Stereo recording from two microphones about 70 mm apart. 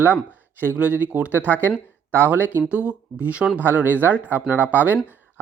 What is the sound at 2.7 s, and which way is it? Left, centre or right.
Speech, centre.